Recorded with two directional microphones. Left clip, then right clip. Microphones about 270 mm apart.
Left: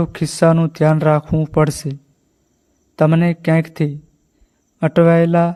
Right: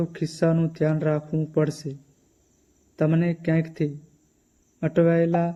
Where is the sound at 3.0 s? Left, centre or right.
Left.